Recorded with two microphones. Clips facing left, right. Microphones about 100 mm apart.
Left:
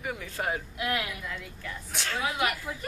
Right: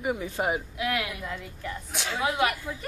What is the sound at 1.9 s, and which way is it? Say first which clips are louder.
Speech: even; 5° right (ahead or behind).